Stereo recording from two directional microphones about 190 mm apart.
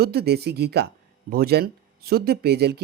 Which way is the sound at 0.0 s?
55° right (ahead or behind).